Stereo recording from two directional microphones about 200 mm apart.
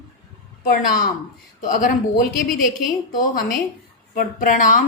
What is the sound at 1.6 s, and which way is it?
A woman's voice, 40° left (ahead or behind).